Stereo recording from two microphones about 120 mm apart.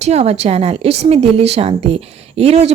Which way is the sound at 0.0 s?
60° right (ahead or behind).